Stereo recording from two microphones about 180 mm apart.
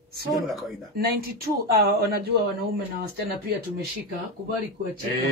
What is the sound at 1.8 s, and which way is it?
Speech, 60° right (ahead or behind).